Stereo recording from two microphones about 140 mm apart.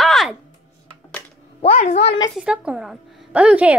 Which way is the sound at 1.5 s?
50° left (ahead or behind).